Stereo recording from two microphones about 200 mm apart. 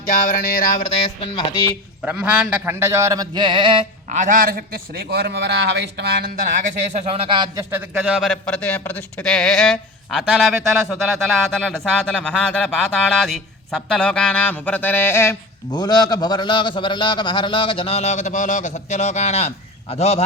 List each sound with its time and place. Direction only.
0.1 s music: 45° left (ahead or behind)
1.2 s speech: 25° left (ahead or behind)
2.0 s a sound: 5° right (ahead or behind); by 4.6 s 45° right (ahead or behind)
5.1 s speech: 55° right (ahead or behind)
6.9 s a sound: 30° right (ahead or behind)
8.5 s speech: 5° left (ahead or behind); by 20.2 s 30° left (ahead or behind)